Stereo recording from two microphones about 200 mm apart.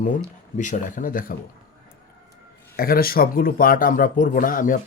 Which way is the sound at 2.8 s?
45° left (ahead or behind).